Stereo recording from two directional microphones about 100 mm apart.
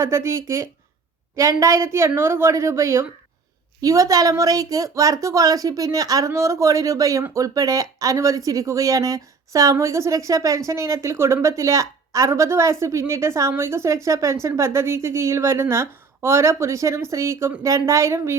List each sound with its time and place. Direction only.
0.0 s a woman's voice: 30° right (ahead or behind)